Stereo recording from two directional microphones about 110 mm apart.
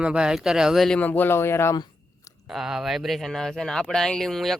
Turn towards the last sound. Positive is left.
turn(degrees=0)  # may be behind; listen again after turning